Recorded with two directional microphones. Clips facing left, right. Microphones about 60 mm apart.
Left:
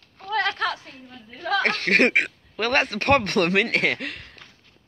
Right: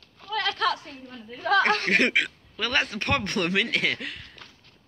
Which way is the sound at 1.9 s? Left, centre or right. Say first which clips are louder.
Left 3 dB; left.